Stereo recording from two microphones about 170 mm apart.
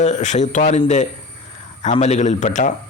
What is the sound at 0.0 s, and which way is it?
Speech, 45° left (ahead or behind).